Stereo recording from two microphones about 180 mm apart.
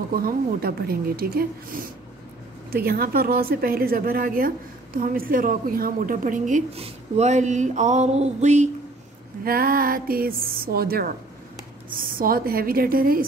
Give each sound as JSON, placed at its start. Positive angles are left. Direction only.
{"t": 0.1, "sound": "a woman's voice", "side_deg": -55}
{"t": 9.4, "sound": "a woman's voice", "side_deg": -55}